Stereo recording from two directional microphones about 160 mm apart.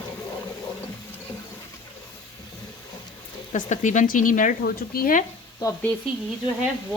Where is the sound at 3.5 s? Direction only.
50° left (ahead or behind).